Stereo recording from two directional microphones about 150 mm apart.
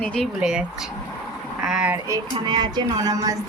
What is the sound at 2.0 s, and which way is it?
Speech, 25° right (ahead or behind).